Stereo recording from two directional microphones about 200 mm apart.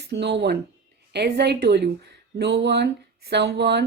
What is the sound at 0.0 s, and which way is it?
A woman's voice, 55° right (ahead or behind).